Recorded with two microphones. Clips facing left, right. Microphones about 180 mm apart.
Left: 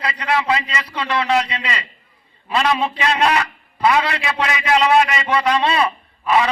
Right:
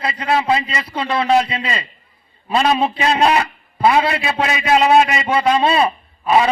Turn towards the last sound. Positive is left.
turn(degrees=-30)  # may be behind; listen again after turning